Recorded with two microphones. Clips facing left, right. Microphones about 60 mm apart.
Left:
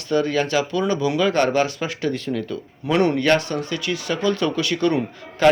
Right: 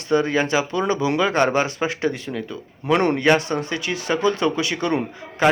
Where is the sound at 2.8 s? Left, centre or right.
Right.